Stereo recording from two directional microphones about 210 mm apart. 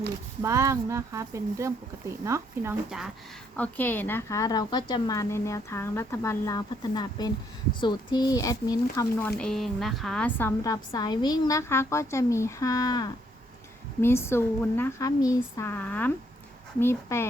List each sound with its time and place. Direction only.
0.4 s speech: 15° right (ahead or behind)
3.6 s a woman's voice: 10° left (ahead or behind)
9.0 s a woman's voice: 5° left (ahead or behind)